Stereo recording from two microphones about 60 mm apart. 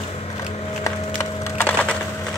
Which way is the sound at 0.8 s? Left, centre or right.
Left.